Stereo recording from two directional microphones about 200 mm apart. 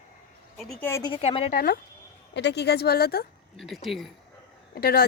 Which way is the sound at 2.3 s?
55° left (ahead or behind).